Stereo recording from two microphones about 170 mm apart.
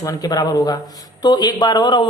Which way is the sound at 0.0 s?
20° left (ahead or behind).